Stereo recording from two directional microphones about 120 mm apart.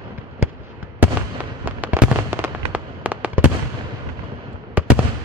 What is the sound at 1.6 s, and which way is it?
Fireworks, 15° right (ahead or behind).